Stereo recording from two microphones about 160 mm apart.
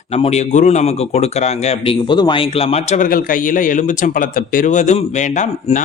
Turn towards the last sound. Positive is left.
turn(degrees=50)  # may be behind; listen again after turning